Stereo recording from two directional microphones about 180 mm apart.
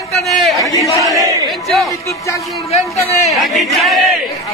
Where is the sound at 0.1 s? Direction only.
Centre (ahead or behind).